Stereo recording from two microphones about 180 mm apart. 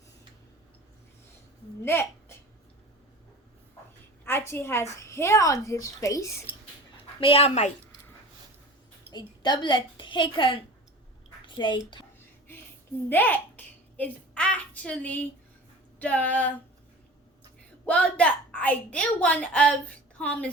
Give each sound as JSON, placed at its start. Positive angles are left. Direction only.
{"t": 1.8, "sound": "a sound", "side_deg": 15}
{"t": 4.3, "sound": "a woman's voice", "side_deg": 15}
{"t": 7.2, "sound": "a woman's voice", "side_deg": 30}
{"t": 9.1, "sound": "a woman's voice", "side_deg": 25}
{"t": 13.1, "sound": "a sound", "side_deg": 10}
{"t": 16.0, "sound": "a woman's voice", "side_deg": 10}
{"t": 17.8, "sound": "a woman's voice", "side_deg": 5}